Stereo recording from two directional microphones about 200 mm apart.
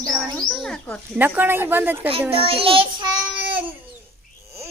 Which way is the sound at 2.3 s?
30° right (ahead or behind).